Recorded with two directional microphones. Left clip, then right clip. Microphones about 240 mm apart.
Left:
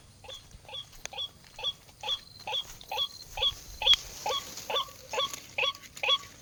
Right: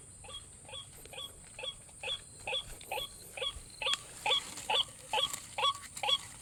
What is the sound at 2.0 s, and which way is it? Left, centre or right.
Wail, left.